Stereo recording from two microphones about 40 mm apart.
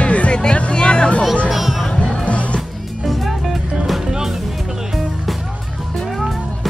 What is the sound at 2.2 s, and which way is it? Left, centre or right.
Music, left.